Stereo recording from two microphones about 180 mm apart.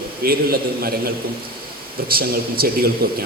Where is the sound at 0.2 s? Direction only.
55° right (ahead or behind).